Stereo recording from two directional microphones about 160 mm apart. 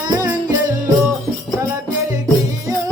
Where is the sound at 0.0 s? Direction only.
25° right (ahead or behind).